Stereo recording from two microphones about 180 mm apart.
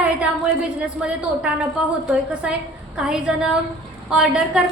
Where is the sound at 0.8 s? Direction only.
5° right (ahead or behind).